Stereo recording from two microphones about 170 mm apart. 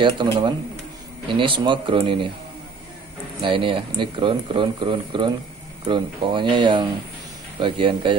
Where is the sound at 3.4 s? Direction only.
30° right (ahead or behind).